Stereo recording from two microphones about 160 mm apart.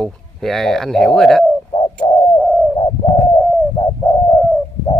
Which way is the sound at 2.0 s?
35° left (ahead or behind).